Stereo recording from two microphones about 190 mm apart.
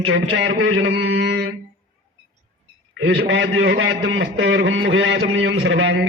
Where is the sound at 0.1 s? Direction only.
65° right (ahead or behind).